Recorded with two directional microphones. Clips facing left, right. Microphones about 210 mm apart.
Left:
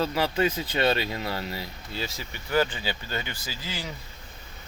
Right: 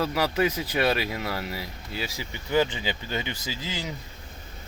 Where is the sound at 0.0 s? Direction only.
25° left (ahead or behind).